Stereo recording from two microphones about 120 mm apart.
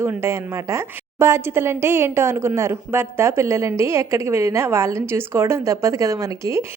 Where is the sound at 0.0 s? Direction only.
20° right (ahead or behind).